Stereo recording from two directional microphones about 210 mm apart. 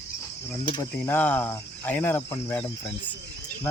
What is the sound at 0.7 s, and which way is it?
Cricket, 15° left (ahead or behind).